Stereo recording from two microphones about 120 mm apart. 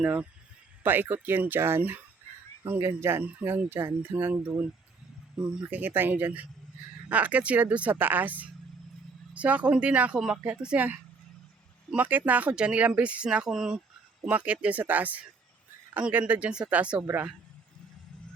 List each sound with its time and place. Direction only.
0.0 s speech: 10° right (ahead or behind)
5.4 s speech: 5° right (ahead or behind)